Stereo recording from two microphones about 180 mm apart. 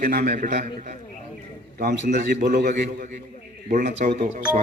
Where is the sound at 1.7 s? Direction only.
55° right (ahead or behind).